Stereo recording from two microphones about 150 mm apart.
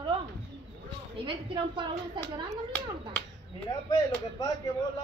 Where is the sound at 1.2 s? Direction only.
30° right (ahead or behind).